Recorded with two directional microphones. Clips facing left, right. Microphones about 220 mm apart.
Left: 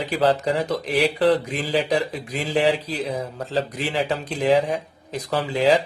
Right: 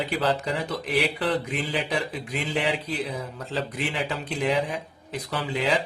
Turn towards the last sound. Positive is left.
turn(degrees=40)  # may be behind; listen again after turning